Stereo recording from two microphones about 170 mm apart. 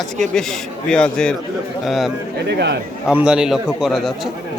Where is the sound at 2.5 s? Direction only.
90° right.